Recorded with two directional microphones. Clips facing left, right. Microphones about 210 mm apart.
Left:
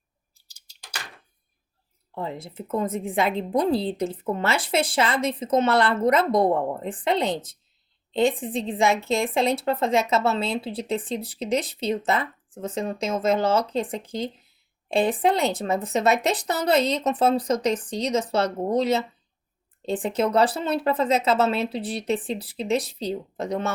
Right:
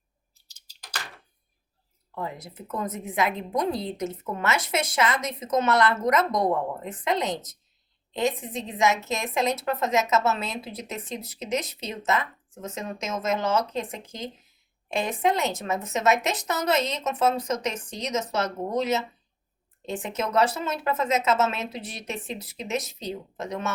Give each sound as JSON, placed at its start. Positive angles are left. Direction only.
{"t": 2.1, "sound": "a woman's voice", "side_deg": 25}